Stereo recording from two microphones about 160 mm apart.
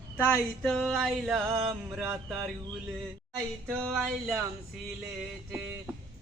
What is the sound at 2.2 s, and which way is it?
Speech, centre (ahead or behind).